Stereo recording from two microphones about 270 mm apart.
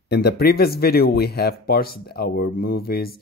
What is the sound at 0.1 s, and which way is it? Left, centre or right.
Speech, left.